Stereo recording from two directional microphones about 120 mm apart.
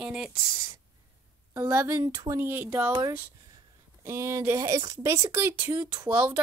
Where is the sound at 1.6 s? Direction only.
20° right (ahead or behind).